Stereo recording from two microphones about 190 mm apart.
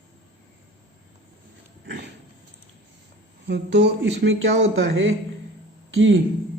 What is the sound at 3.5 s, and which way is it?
Speech, 65° right (ahead or behind).